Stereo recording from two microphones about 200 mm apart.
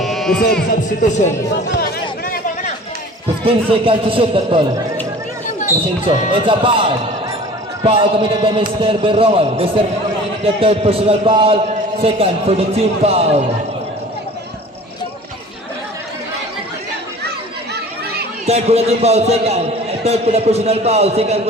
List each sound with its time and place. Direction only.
0.0 s music: centre (ahead or behind)
1.7 s a sound: 50° left (ahead or behind)
3.4 s a man's voice: 25° right (ahead or behind)
6.1 s a man's voice: 25° right (ahead or behind)
18.4 s a man's voice: 30° right (ahead or behind)